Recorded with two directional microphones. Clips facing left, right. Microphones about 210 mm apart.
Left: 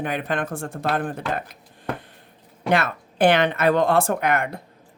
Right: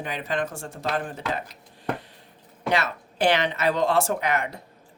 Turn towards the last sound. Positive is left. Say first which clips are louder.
# left 3 dB
turn(degrees=55)  # may be behind; listen again after turning